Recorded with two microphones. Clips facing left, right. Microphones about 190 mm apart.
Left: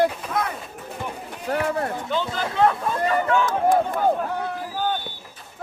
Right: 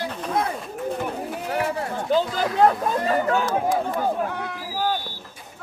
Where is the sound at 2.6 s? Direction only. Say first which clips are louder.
Right 1 dB; 35° right (ahead or behind).